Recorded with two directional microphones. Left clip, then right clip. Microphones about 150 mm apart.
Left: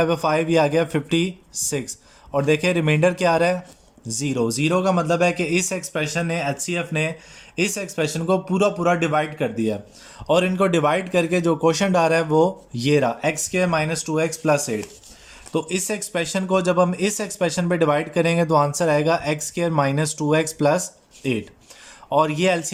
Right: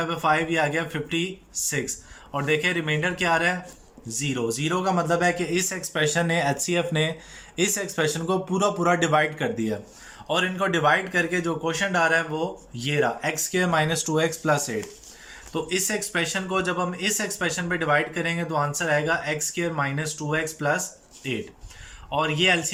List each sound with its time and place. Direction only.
0.0 s a man's voice: 35° left (ahead or behind); by 14.8 s 15° left (ahead or behind)
15.5 s speech: 30° left (ahead or behind)
22.1 s speech: 35° left (ahead or behind)